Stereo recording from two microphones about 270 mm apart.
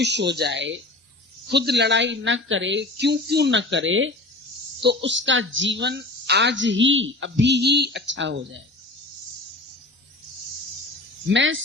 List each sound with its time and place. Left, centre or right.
0.0 s a woman's voice: right
11.3 s speech: right